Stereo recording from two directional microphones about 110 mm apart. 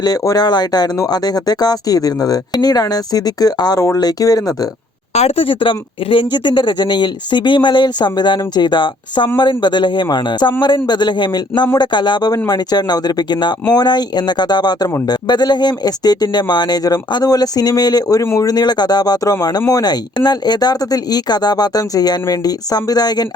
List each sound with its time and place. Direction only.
0.0 s speech: 35° left (ahead or behind)
5.1 s a woman's voice: 70° left (ahead or behind); by 23.2 s 40° left (ahead or behind)